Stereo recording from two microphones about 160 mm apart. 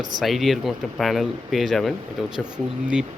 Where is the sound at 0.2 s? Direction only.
Centre (ahead or behind).